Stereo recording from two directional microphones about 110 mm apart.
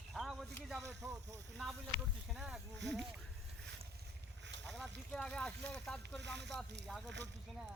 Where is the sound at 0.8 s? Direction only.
30° right (ahead or behind).